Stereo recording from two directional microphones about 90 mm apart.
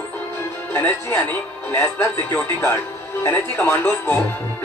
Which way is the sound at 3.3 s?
20° left (ahead or behind).